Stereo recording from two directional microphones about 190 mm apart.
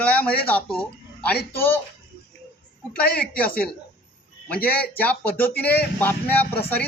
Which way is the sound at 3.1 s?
5° left (ahead or behind).